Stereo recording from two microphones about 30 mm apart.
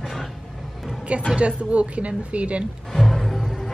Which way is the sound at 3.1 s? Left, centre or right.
Centre.